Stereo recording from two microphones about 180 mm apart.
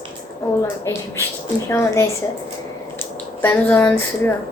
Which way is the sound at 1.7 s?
15° left (ahead or behind).